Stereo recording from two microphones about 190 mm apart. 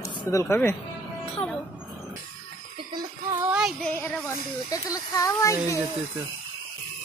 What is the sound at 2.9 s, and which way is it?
Speech, 20° right (ahead or behind).